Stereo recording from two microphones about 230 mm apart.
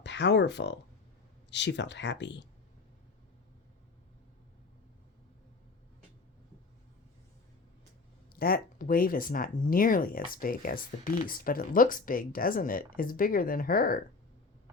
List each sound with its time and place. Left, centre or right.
0.0 s speech: left
8.3 s speech: left